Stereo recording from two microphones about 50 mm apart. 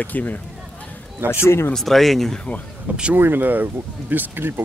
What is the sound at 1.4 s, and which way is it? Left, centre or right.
Speech, left.